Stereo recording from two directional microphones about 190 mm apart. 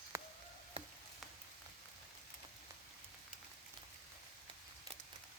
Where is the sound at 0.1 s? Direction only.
15° right (ahead or behind).